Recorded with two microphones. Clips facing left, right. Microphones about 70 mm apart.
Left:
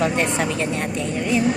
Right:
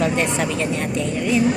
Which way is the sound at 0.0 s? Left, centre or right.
Left.